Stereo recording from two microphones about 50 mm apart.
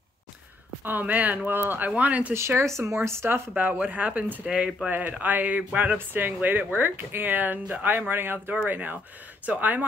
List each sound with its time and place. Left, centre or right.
0.8 s speech: right
1.9 s speech: right
2.3 s speech: right
3.0 s speech: right
3.5 s speech: right
4.5 s speech: centre
4.8 s speech: right
8.1 s speech: right